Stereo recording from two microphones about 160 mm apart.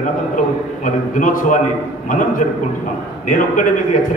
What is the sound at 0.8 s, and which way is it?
A man's voice, 55° left (ahead or behind).